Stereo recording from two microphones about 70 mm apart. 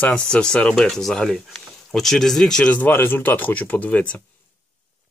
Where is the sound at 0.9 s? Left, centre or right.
Centre.